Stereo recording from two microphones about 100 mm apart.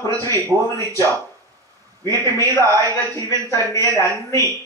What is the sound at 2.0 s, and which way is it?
Speech, 35° right (ahead or behind).